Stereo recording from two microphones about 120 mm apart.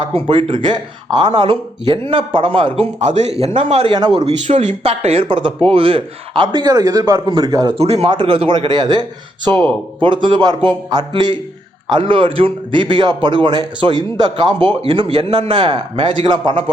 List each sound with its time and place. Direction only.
0.2 s a man's voice: 45° right (ahead or behind)
3.0 s speech: 75° right (ahead or behind)
3.8 s a man's voice: 35° right (ahead or behind)
4.1 s a man's voice: 65° right (ahead or behind); by 7.8 s 30° right (ahead or behind)
7.8 s speech: 60° right (ahead or behind)
8.1 s a man's voice: 45° right (ahead or behind)